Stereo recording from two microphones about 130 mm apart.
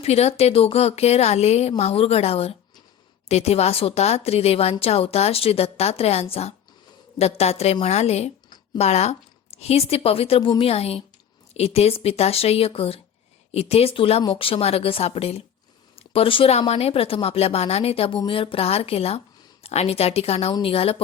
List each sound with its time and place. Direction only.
0.0 s a woman's voice: 55° left (ahead or behind)